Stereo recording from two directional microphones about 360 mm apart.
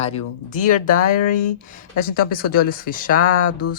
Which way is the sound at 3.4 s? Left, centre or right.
Left.